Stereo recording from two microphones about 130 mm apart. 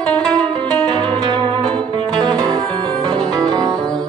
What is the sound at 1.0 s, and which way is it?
Music, 35° right (ahead or behind).